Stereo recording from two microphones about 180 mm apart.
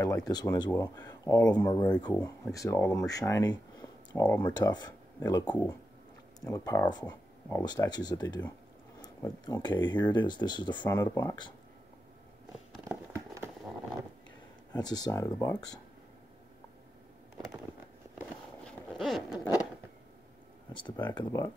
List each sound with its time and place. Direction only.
0.3 s speech: 20° left (ahead or behind)
13.1 s a sound: 15° right (ahead or behind)
14.8 s speech: 20° left (ahead or behind)
18.6 s zipper: 5° left (ahead or behind)
20.7 s speech: 25° left (ahead or behind)